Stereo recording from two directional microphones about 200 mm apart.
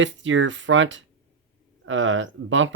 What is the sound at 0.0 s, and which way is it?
Speech, 70° right (ahead or behind).